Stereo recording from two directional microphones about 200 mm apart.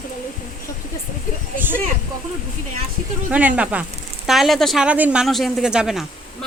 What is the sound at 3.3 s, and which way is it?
Speech, 5° right (ahead or behind).